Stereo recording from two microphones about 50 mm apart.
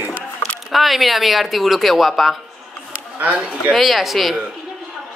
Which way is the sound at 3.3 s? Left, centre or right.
Right.